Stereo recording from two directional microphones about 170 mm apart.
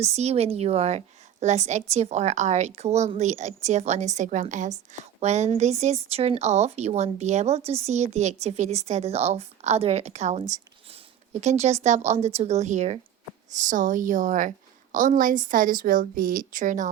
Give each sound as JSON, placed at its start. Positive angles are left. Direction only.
{"t": 0.0, "sound": "a woman's voice", "side_deg": -40}